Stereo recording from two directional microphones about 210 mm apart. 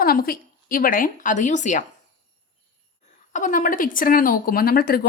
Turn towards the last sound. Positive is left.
turn(degrees=45)  # may be behind; listen again after turning